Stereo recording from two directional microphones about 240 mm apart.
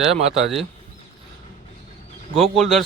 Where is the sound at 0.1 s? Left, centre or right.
Right.